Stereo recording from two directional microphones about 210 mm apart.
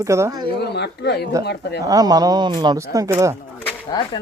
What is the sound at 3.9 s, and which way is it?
Speech, 25° left (ahead or behind).